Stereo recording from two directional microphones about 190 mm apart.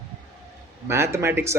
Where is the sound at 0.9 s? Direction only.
15° right (ahead or behind).